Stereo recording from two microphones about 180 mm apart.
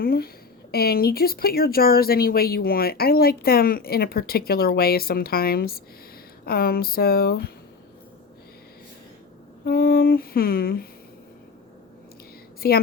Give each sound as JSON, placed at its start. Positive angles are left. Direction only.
{"t": 0.0, "sound": "a woman's voice", "side_deg": 55}
{"t": 9.6, "sound": "speech", "side_deg": 55}
{"t": 12.6, "sound": "speech", "side_deg": 60}